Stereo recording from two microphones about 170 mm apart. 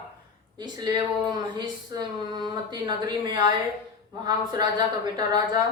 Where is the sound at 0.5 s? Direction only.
25° right (ahead or behind).